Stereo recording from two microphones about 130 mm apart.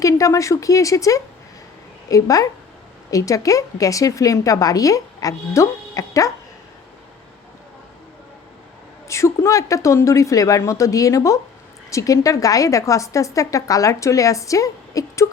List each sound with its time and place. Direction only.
0.0 s a woman's voice: 25° left (ahead or behind)
9.0 s a woman's voice: 20° left (ahead or behind)